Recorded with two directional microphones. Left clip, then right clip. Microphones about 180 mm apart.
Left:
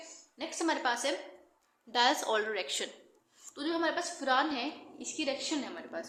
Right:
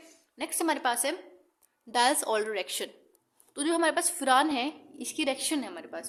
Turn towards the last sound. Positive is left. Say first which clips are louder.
# right 2 dB
turn(degrees=-55)  # may be behind; listen again after turning